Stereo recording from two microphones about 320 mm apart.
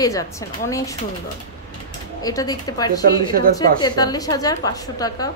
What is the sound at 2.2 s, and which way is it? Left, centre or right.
A woman's voice, centre.